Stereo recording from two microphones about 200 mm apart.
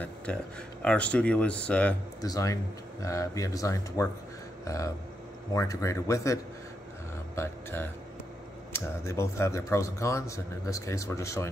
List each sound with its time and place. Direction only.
0.3 s speech: 5° left (ahead or behind)
2.2 s a man's voice: 15° left (ahead or behind)